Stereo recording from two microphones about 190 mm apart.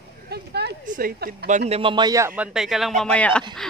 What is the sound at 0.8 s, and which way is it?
Speech, 50° right (ahead or behind).